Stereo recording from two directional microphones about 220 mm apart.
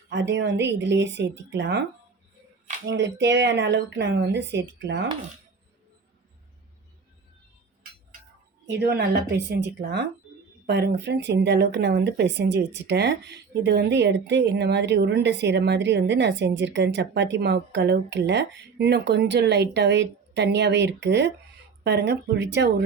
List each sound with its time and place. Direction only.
0.1 s speech: 55° right (ahead or behind)
2.8 s speech: 55° right (ahead or behind)
8.7 s speech: 50° right (ahead or behind)